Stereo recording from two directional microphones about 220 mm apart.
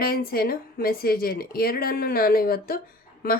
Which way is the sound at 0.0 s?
40° left (ahead or behind).